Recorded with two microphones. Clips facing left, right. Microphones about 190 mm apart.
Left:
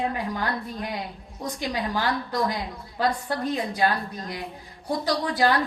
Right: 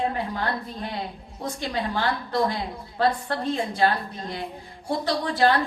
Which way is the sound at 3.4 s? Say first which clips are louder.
Right 1 dB; 25° right (ahead or behind).